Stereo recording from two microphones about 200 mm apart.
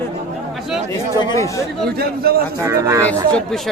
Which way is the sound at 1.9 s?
50° right (ahead or behind).